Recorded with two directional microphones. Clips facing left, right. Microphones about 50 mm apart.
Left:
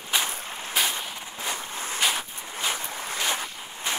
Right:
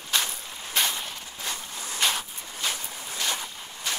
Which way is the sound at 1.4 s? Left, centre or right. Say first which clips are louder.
Left 4 dB; left.